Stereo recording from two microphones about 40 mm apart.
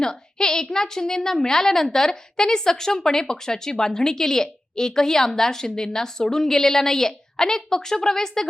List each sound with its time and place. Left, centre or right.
0.0 s a woman's voice: centre